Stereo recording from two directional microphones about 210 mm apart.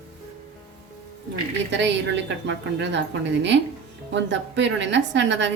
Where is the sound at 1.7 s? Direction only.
60° right (ahead or behind).